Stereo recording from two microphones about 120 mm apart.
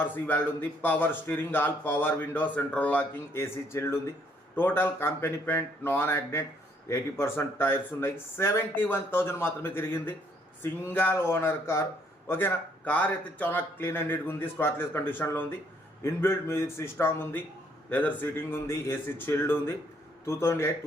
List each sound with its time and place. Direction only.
0.0 s a man's voice: 15° left (ahead or behind)